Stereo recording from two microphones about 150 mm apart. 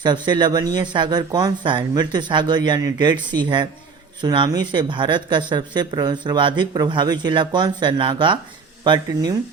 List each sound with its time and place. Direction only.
0.0 s speech: 30° right (ahead or behind)